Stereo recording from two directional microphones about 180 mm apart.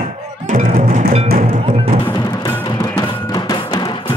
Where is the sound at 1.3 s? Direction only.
35° right (ahead or behind).